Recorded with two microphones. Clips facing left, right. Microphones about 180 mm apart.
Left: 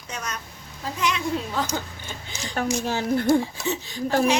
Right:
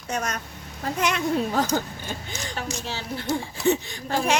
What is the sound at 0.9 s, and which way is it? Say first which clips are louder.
Speech: right 2 dB; 55° right (ahead or behind).